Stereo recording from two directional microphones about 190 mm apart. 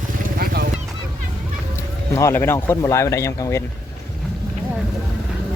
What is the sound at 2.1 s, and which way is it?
Speech, 15° left (ahead or behind).